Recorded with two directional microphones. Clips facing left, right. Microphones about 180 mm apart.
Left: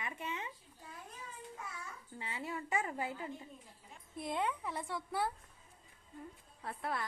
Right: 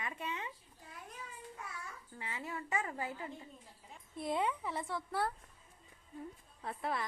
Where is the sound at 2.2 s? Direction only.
25° left (ahead or behind).